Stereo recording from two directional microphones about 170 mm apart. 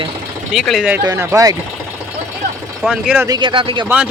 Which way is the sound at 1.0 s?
20° right (ahead or behind).